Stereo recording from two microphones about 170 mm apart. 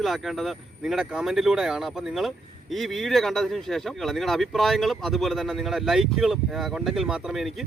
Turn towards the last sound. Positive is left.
turn(degrees=0)  # may be behind; listen again after turning